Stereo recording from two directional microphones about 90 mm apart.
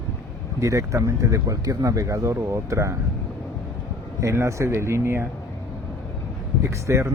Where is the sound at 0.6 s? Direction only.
35° right (ahead or behind).